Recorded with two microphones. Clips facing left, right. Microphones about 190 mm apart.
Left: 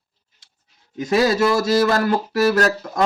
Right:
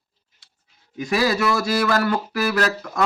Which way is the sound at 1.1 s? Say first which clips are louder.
Left 4 dB; 25° left (ahead or behind).